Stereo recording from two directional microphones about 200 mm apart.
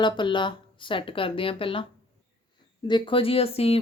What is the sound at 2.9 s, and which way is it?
Speech, 25° left (ahead or behind).